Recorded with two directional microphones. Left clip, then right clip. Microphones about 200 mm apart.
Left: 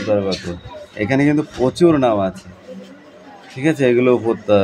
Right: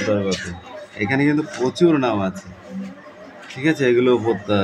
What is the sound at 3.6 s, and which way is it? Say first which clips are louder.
Speech: left 2 dB; 20° left (ahead or behind).